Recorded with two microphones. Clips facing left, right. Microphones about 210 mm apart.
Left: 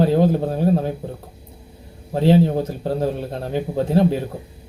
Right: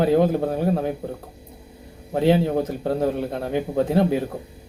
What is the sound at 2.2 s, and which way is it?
Speech, 30° left (ahead or behind).